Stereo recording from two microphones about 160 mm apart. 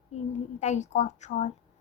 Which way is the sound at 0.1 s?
45° left (ahead or behind).